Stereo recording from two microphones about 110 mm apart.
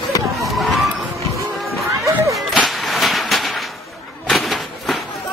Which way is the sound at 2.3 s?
Centre (ahead or behind).